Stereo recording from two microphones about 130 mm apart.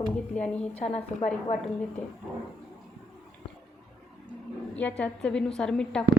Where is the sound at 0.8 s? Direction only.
60° left (ahead or behind).